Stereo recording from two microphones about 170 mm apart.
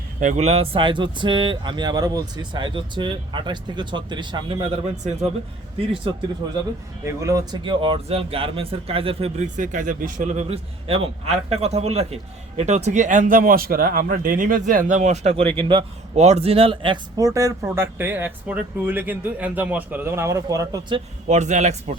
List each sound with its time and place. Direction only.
0.2 s speech: 40° right (ahead or behind)
7.0 s speech: 15° right (ahead or behind); by 9.5 s 35° right (ahead or behind)
9.6 s a man's voice: 50° right (ahead or behind)
15.5 s speech: 30° right (ahead or behind)
21.2 s a man's voice: 45° right (ahead or behind)